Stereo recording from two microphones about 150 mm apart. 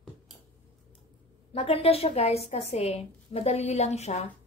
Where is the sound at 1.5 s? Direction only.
40° left (ahead or behind).